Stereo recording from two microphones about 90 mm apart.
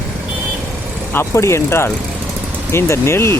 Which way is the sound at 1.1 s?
30° left (ahead or behind).